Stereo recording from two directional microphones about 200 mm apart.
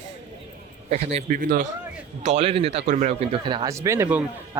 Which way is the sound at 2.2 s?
30° right (ahead or behind).